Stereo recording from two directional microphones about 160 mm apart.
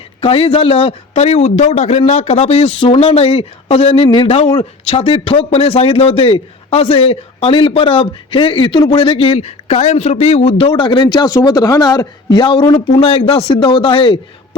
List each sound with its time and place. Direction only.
0.2 s a man's voice: 35° left (ahead or behind)